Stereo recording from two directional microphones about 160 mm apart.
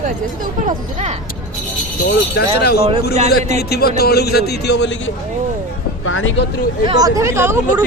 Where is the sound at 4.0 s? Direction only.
85° left.